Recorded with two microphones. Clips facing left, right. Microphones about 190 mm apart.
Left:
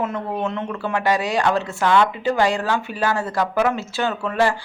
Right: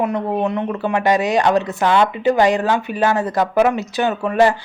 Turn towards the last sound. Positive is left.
turn(degrees=-20)  # may be behind; listen again after turning